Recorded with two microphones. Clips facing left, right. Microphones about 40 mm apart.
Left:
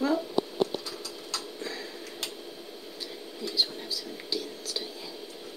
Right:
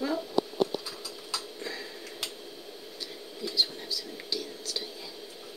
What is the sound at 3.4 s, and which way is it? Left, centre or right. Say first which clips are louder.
Whispering: even; centre.